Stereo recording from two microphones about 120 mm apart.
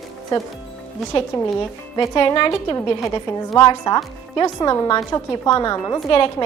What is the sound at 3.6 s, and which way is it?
Speech, 35° left (ahead or behind).